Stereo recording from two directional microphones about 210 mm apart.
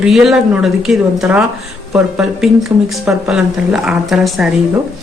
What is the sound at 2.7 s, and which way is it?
Speech, 20° right (ahead or behind).